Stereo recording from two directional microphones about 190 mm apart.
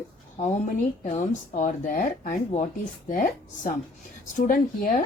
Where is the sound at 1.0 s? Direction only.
40° left (ahead or behind).